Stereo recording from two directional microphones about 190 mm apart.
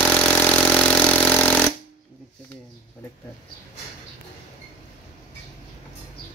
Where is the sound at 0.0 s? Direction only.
5° left (ahead or behind).